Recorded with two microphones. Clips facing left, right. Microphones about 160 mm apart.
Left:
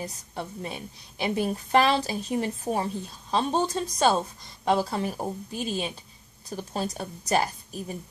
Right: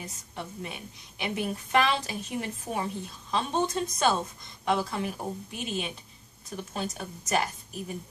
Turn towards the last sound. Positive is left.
turn(degrees=35)  # may be behind; listen again after turning